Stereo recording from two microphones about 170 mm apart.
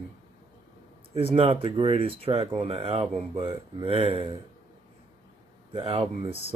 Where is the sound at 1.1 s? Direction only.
35° right (ahead or behind).